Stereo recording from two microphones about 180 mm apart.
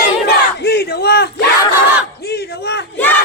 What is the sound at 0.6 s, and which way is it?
Battle cry, 65° left (ahead or behind).